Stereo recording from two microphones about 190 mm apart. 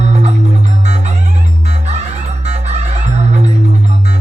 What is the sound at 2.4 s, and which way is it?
Music, 35° right (ahead or behind).